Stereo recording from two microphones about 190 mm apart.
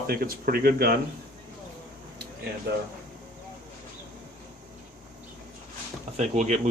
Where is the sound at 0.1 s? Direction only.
50° right (ahead or behind).